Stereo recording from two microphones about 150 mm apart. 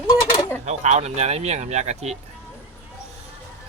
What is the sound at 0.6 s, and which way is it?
Speech, 50° right (ahead or behind).